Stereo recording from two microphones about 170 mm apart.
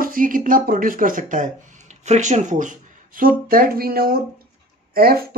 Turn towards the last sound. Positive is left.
turn(degrees=-65)  # may be behind; listen again after turning